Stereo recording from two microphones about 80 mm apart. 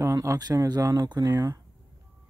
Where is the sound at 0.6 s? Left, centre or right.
Right.